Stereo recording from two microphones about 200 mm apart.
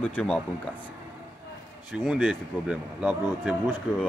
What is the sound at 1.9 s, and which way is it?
A man's voice, 10° right (ahead or behind).